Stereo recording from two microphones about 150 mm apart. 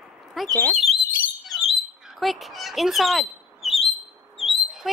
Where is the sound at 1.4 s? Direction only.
Centre (ahead or behind).